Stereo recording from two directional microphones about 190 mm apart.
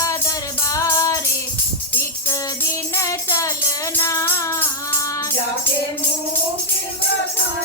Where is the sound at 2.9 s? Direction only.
15° left (ahead or behind).